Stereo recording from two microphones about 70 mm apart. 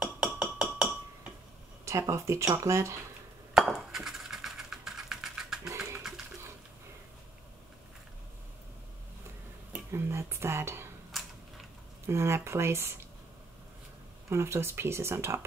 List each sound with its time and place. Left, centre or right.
0.0 s hammer: centre
1.9 s speech: right
3.5 s coin: centre
9.8 s a sound: right
11.1 s a sound: centre
12.1 s speech: right
14.3 s speech: right